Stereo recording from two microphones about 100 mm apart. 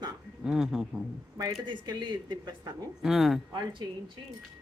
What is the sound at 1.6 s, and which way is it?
A woman's voice, 50° right (ahead or behind).